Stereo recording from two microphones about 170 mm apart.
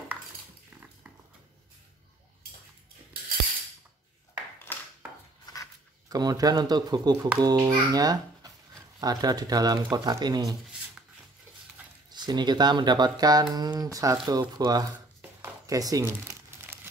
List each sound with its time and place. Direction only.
4.7 s a sound: 10° left (ahead or behind)
6.0 s speech: 20° right (ahead or behind)
12.1 s speech: 25° right (ahead or behind)
15.4 s crumpling: 20° right (ahead or behind)